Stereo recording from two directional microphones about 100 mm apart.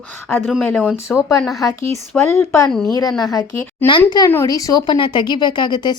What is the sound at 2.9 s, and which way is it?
Speech, 35° left (ahead or behind).